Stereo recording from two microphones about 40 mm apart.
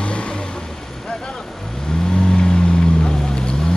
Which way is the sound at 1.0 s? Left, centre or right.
Centre.